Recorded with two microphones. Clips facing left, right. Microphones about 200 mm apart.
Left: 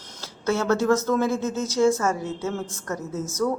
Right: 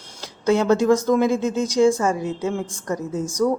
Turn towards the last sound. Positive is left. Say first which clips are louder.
# right 4 dB
turn(degrees=-15)  # may be behind; listen again after turning